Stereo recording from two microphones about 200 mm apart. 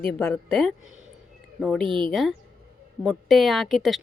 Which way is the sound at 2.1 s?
Centre (ahead or behind).